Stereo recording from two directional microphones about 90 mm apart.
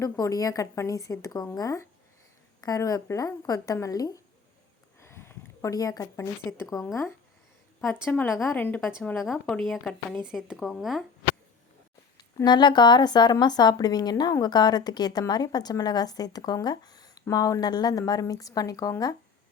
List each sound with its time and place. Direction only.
0.0 s a woman's voice: 40° left (ahead or behind)
4.9 s a sound: 30° left (ahead or behind)
5.7 s a woman's voice: 40° left (ahead or behind)
7.9 s a woman's voice: 20° left (ahead or behind)
9.1 s speech: centre (ahead or behind)
10.2 s speech: 5° right (ahead or behind)
12.5 s a woman's voice: 55° left (ahead or behind)